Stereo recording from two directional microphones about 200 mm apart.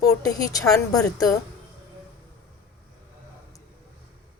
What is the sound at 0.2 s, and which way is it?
A woman's voice, 15° left (ahead or behind).